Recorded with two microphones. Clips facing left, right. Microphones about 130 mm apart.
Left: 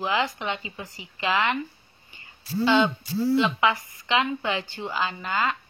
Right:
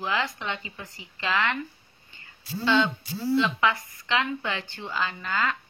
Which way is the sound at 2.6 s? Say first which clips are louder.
Left 2 dB; 20° left (ahead or behind).